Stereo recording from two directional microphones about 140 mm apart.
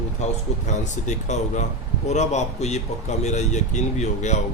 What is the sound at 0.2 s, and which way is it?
Speech, 55° left (ahead or behind).